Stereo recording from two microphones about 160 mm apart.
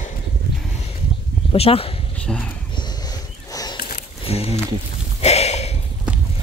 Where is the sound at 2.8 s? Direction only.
25° left (ahead or behind).